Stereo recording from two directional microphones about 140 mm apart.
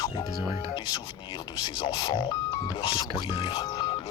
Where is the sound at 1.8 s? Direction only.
35° left (ahead or behind).